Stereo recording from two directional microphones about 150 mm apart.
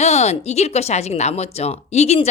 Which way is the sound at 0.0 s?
45° left (ahead or behind).